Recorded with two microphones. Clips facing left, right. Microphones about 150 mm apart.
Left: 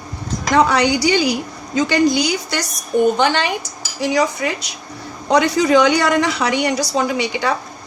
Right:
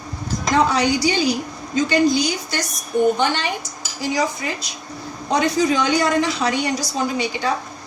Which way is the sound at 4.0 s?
75° left (ahead or behind).